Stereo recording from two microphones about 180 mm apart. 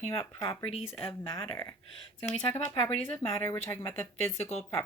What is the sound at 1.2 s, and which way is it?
Speech, 25° left (ahead or behind).